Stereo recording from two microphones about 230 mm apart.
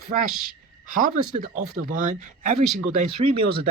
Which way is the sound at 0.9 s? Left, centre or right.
Right.